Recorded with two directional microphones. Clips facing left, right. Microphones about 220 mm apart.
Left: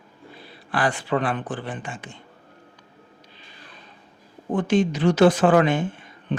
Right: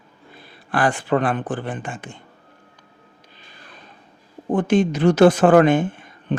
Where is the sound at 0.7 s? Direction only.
50° right (ahead or behind).